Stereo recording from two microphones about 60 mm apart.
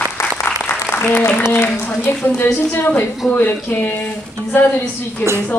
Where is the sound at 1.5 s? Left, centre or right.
Left.